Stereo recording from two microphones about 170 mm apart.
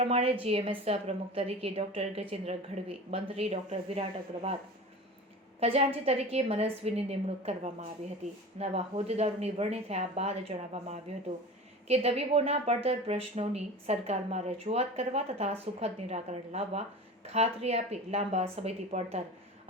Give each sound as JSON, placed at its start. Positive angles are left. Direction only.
{"t": 0.0, "sound": "a woman's voice", "side_deg": -35}
{"t": 5.5, "sound": "a woman's voice", "side_deg": -35}